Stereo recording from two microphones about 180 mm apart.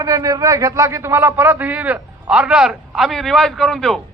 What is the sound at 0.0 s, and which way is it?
A man's voice, 20° right (ahead or behind).